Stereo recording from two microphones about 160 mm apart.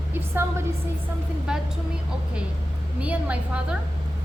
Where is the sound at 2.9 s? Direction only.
10° right (ahead or behind).